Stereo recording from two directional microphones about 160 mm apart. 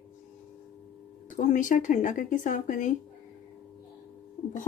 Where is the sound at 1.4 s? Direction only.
50° left (ahead or behind).